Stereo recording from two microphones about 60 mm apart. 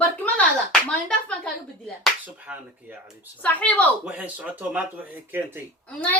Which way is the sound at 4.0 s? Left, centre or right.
Right.